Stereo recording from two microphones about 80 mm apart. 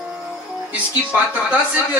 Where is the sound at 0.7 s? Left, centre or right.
Centre.